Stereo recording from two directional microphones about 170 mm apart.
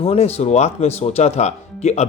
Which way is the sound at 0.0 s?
35° left (ahead or behind).